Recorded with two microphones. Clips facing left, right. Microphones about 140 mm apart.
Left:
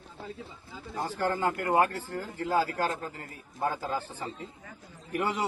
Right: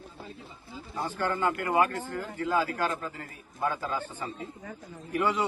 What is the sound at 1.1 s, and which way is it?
A man's voice, 35° left (ahead or behind).